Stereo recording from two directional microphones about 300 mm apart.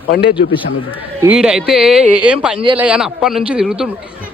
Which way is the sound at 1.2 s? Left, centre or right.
Centre.